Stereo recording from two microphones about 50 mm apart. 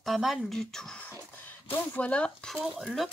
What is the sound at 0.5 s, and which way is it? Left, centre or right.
Speech, centre.